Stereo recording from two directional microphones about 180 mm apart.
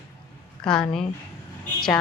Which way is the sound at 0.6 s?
5° left (ahead or behind).